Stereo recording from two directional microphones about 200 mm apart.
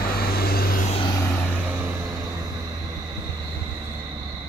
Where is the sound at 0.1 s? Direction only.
50° left (ahead or behind).